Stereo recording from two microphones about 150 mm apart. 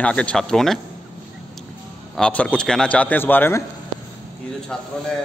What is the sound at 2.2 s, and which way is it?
A man's voice, 10° left (ahead or behind).